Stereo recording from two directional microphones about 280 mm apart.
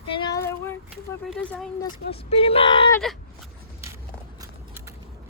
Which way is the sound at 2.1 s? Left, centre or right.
Left.